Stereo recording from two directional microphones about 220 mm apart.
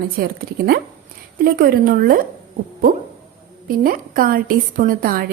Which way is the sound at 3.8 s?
40° right (ahead or behind).